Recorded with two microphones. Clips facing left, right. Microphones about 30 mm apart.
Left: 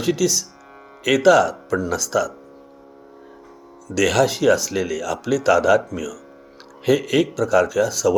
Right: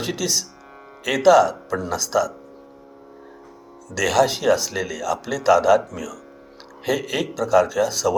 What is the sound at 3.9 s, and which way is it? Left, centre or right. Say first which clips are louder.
Speech: left 1 dB; centre.